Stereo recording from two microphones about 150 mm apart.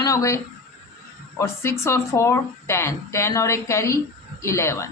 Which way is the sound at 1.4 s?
20° left (ahead or behind).